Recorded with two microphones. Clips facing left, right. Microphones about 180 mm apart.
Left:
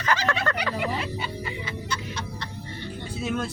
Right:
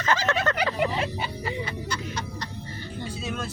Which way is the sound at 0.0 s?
25° right (ahead or behind).